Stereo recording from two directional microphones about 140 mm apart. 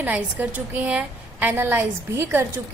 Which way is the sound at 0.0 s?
10° right (ahead or behind).